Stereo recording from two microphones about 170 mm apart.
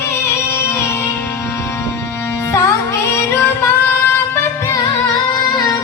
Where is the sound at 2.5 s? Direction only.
15° left (ahead or behind).